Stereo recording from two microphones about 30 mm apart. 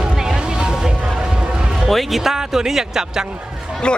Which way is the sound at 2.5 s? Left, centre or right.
Centre.